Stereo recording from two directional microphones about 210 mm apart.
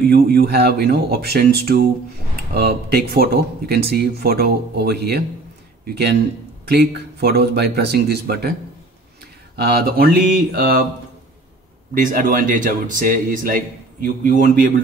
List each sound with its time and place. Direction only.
0.1 s speech: 50° right (ahead or behind)
9.6 s speech: 50° right (ahead or behind)
11.9 s speech: 40° right (ahead or behind)